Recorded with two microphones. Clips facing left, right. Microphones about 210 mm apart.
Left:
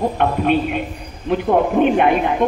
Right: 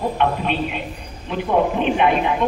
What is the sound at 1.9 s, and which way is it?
Speech, 45° left (ahead or behind).